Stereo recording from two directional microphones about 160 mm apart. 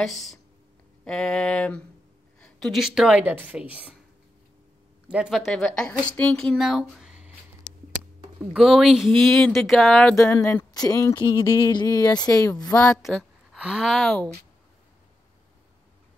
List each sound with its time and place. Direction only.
0.0 s speech: centre (ahead or behind)
5.1 s speech: 5° right (ahead or behind)
7.7 s a sound: 10° left (ahead or behind)
8.5 s speech: centre (ahead or behind)
10.1 s speech: 20° left (ahead or behind)
12.8 s a woman's voice: 5° left (ahead or behind)